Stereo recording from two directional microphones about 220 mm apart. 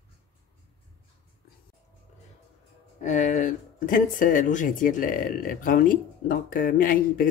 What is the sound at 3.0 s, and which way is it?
Speech, 35° left (ahead or behind).